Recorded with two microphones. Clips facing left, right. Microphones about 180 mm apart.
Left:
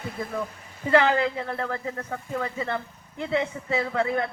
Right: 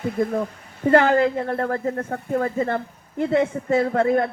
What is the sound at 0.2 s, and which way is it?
A man's voice, 50° right (ahead or behind).